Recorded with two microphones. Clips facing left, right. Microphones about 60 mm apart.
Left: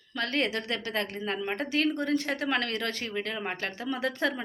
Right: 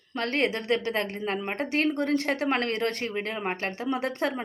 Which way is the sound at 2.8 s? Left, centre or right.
Right.